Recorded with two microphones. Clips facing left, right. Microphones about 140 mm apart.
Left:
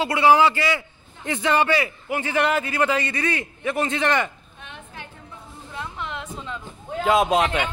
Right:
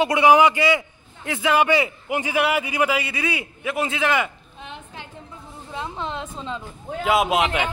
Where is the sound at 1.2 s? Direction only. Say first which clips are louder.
Right 1 dB; 5° right (ahead or behind).